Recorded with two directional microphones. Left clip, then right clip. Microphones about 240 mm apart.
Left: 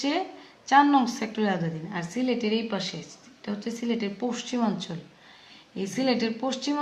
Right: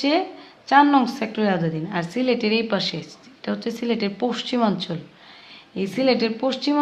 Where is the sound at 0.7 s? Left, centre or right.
Right.